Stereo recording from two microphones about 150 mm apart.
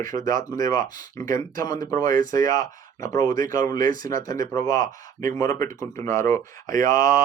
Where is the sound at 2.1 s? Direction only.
60° right (ahead or behind).